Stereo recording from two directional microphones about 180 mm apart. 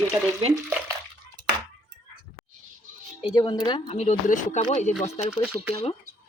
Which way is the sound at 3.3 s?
20° left (ahead or behind).